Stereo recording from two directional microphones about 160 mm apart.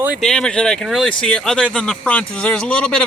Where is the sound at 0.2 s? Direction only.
5° left (ahead or behind).